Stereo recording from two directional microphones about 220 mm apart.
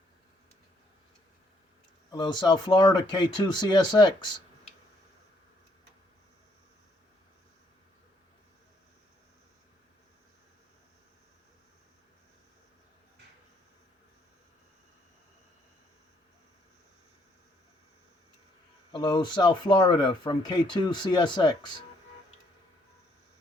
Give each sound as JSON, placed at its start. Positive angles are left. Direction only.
{"t": 2.0, "sound": "speech", "side_deg": 20}
{"t": 18.9, "sound": "speech", "side_deg": 20}